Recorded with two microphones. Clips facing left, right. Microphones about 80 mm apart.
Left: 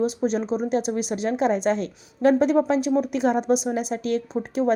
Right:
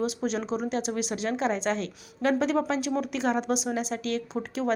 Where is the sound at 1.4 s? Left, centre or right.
Left.